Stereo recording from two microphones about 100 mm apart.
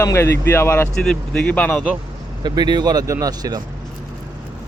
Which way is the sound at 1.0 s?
5° left (ahead or behind).